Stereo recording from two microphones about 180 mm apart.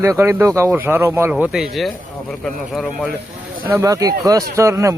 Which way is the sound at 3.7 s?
15° right (ahead or behind).